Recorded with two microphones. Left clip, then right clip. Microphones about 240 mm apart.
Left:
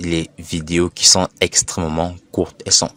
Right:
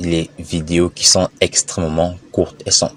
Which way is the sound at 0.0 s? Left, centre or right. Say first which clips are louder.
Right 2 dB; left.